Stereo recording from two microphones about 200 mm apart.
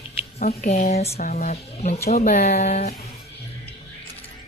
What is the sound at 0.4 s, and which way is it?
Speech, 45° left (ahead or behind).